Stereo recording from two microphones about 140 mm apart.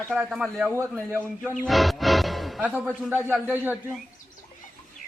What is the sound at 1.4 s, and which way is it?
Music, centre (ahead or behind).